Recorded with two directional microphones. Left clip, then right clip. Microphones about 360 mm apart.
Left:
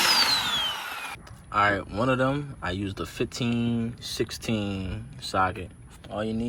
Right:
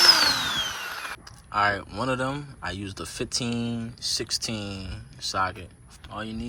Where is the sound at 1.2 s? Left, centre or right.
Centre.